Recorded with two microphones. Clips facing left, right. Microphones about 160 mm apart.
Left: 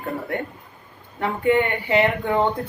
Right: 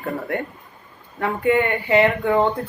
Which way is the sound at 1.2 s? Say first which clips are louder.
Right 1 dB; 20° left (ahead or behind).